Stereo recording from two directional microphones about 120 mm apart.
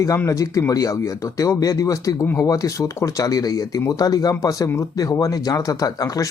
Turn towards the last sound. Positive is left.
turn(degrees=30)  # may be behind; listen again after turning